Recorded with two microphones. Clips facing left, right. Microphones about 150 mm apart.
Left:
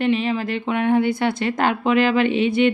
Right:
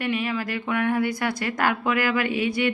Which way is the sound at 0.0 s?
25° left (ahead or behind).